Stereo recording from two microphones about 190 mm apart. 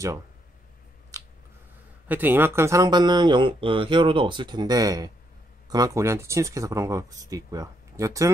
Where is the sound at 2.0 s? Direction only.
10° right (ahead or behind).